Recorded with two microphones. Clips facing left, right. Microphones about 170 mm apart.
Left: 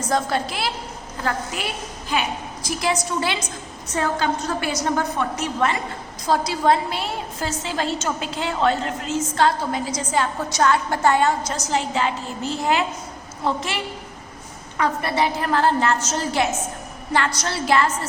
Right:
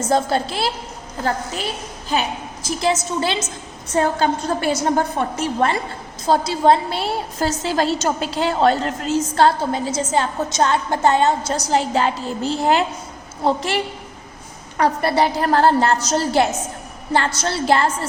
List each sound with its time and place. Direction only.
0.0 s a woman's voice: 30° right (ahead or behind)
14.8 s a woman's voice: 35° right (ahead or behind)